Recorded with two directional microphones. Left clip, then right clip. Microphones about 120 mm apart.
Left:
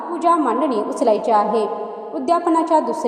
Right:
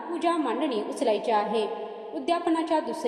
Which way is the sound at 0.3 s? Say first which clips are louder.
Left 10 dB; 30° left (ahead or behind).